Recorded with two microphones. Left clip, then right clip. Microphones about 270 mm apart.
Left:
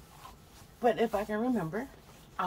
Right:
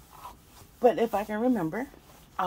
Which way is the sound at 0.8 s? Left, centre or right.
Centre.